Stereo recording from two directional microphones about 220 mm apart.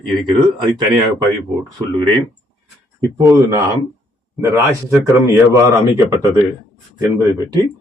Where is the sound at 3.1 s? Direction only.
15° right (ahead or behind).